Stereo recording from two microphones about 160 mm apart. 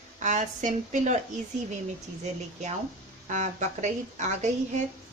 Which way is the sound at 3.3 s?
50° right (ahead or behind).